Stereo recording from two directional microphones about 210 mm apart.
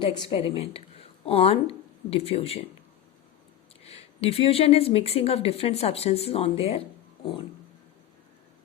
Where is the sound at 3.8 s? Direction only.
30° left (ahead or behind).